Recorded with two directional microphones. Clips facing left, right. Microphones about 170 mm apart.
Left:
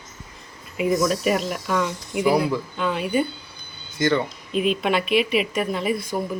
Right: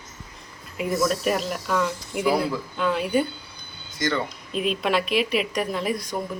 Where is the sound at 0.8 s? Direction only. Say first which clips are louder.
Left 4 dB; 10° left (ahead or behind).